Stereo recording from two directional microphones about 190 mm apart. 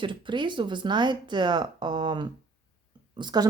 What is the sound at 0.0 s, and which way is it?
A woman's voice, 25° right (ahead or behind).